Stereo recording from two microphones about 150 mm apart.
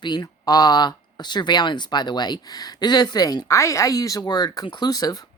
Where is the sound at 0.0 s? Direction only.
30° left (ahead or behind).